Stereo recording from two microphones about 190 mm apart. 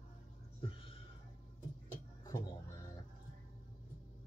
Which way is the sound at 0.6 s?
25° left (ahead or behind).